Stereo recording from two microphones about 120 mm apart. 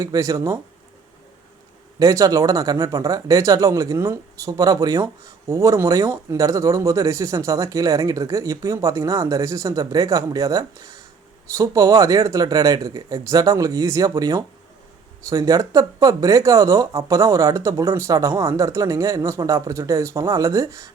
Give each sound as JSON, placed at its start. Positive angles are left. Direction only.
{"t": 0.0, "sound": "speech", "side_deg": -30}
{"t": 2.0, "sound": "speech", "side_deg": -30}